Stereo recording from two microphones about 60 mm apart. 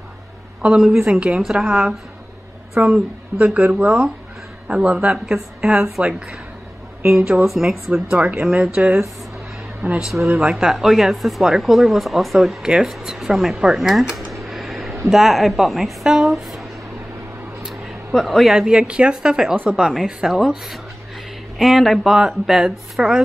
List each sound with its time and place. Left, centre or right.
0.6 s speech: centre
2.8 s speech: right
3.3 s speech: centre
9.8 s speech: right
10.2 s speech: centre
10.5 s a woman's voice: centre
17.6 s a sound: centre
18.7 s speech: centre